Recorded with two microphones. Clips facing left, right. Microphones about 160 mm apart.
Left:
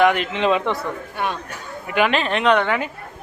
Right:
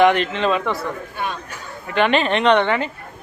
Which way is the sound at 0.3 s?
20° left (ahead or behind).